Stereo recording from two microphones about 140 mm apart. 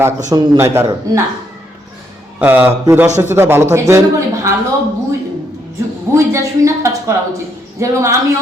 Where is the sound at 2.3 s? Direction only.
10° right (ahead or behind).